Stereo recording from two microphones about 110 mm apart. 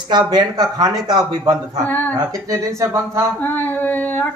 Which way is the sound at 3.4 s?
20° left (ahead or behind).